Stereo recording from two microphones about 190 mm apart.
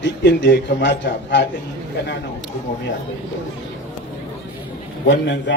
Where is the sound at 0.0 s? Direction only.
65° left (ahead or behind).